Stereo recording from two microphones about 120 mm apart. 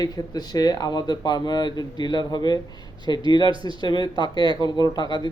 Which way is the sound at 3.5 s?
45° right (ahead or behind).